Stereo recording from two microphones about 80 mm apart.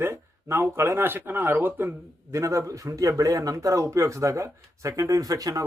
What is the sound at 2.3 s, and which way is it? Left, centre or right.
Speech, right.